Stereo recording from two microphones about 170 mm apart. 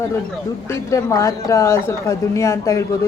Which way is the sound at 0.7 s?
20° left (ahead or behind).